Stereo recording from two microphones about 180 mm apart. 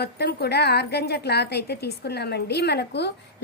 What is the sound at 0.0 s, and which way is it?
A woman's voice, 65° left (ahead or behind).